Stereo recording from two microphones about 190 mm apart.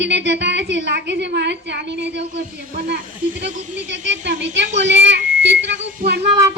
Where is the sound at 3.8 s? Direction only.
70° right (ahead or behind).